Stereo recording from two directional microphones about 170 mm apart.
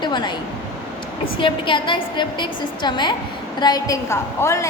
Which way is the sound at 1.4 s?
30° left (ahead or behind).